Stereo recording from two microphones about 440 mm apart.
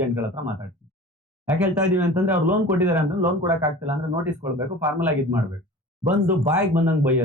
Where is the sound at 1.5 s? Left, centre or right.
Centre.